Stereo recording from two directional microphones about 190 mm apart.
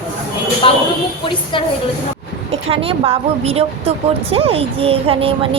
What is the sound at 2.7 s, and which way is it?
Speech, 30° right (ahead or behind).